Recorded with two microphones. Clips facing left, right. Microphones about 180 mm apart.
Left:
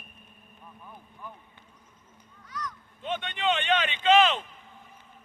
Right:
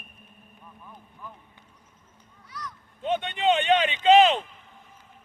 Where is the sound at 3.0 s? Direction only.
40° right (ahead or behind).